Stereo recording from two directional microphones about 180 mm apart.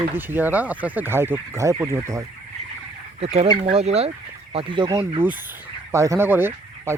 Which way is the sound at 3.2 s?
35° right (ahead or behind).